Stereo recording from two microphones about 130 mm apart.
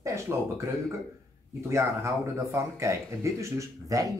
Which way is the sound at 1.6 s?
20° right (ahead or behind).